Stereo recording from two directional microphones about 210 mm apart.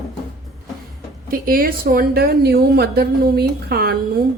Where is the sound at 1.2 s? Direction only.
45° right (ahead or behind).